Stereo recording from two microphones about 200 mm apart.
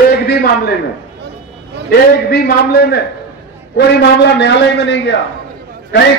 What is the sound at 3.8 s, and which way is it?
A man's voice, 55° left (ahead or behind).